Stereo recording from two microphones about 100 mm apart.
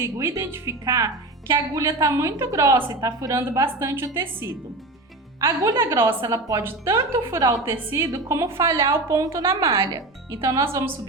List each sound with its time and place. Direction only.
0.0 s speech: 30° right (ahead or behind)
5.4 s a woman's voice: 35° right (ahead or behind)